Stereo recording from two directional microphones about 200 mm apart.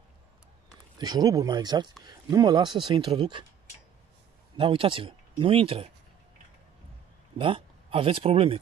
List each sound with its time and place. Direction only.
0.9 s speech: 20° right (ahead or behind)
4.6 s speech: 25° right (ahead or behind)
7.3 s speech: 25° right (ahead or behind)